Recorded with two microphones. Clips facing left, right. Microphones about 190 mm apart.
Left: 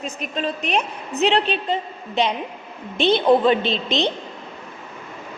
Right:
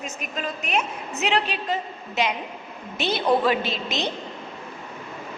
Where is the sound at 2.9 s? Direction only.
30° left (ahead or behind).